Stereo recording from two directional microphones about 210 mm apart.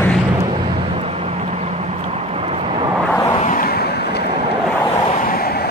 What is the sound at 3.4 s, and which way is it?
Vehicle, 45° left (ahead or behind).